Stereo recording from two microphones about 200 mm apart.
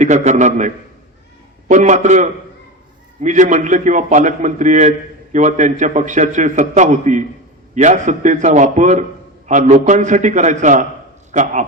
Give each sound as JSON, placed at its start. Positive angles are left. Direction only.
{"t": 0.0, "sound": "a man's voice", "side_deg": -35}